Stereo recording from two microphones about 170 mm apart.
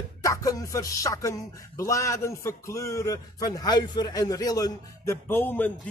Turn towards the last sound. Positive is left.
turn(degrees=10)  # may be behind; listen again after turning